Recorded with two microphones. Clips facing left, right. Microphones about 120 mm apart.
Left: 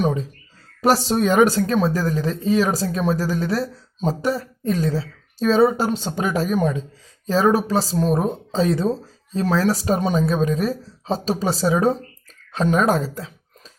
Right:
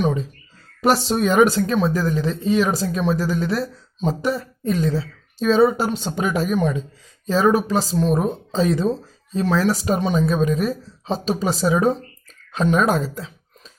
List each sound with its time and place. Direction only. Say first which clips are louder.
0.8 s speech: even; 35° left (ahead or behind)